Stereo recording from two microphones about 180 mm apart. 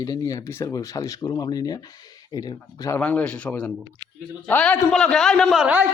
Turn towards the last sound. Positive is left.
turn(degrees=-5)  # may be behind; listen again after turning